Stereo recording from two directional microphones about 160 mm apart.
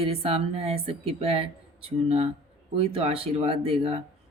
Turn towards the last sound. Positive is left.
turn(degrees=-35)  # may be behind; listen again after turning